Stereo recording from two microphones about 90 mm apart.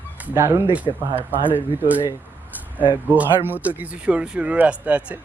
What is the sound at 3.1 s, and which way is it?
Speech, 20° right (ahead or behind).